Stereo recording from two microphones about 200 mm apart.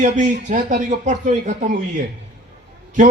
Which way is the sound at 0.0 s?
35° right (ahead or behind).